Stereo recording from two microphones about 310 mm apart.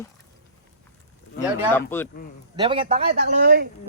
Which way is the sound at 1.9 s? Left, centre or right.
Centre.